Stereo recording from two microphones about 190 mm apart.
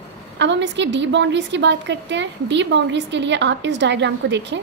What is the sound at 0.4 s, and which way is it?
A woman's voice, 70° right (ahead or behind).